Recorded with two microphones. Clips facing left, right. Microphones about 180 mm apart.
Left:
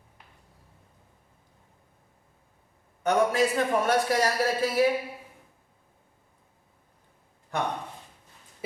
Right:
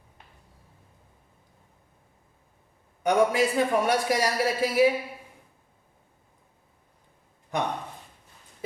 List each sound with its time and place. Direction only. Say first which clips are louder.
3.0 s a man's voice: right 1 dB; 15° right (ahead or behind)
7.5 s speech: right 1 dB; 15° right (ahead or behind)